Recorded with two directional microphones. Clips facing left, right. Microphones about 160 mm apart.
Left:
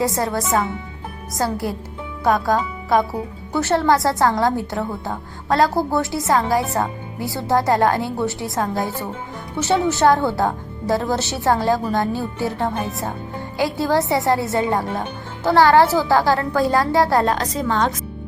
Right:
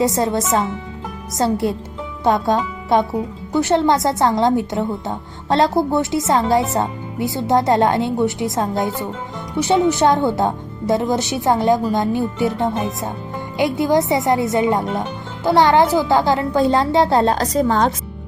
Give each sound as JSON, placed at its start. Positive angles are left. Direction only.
{"t": 0.0, "sound": "a woman's voice", "side_deg": -20}
{"t": 17.3, "sound": "a woman's voice", "side_deg": -40}